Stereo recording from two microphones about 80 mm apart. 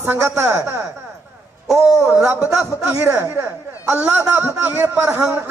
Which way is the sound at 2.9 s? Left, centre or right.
Right.